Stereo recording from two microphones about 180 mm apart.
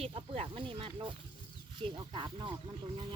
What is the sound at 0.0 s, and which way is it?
Speech, 30° right (ahead or behind).